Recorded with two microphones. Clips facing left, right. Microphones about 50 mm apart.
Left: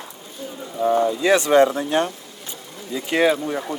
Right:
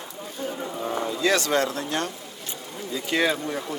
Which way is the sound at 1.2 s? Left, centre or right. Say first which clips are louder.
Left 6 dB; centre.